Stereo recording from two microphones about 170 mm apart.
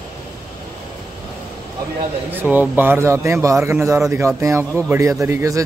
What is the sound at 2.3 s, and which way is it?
Speech, 10° right (ahead or behind).